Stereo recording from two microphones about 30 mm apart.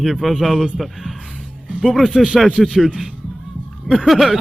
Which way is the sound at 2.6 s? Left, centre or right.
Centre.